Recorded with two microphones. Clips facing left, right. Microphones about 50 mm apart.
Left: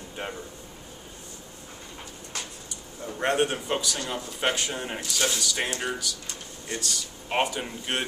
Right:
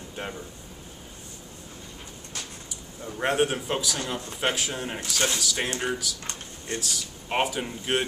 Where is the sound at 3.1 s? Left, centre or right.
Centre.